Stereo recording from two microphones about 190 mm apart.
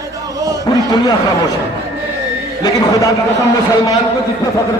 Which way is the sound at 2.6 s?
20° left (ahead or behind).